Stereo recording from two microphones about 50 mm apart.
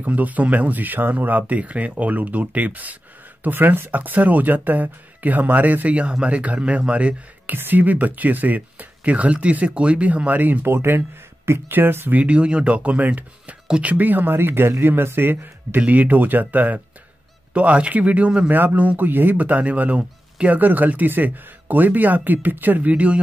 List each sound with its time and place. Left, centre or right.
0.0 s speech: right
7.4 s speech: right
10.6 s speech: right
12.1 s speech: right
15.8 s speech: right
18.5 s speech: right